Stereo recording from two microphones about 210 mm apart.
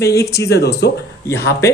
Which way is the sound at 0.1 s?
50° left (ahead or behind).